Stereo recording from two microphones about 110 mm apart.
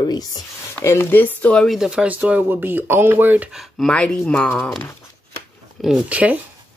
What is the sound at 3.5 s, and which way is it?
Speech, 5° left (ahead or behind).